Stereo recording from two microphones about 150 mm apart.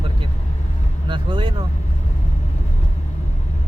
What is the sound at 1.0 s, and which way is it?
Vehicle, 30° right (ahead or behind).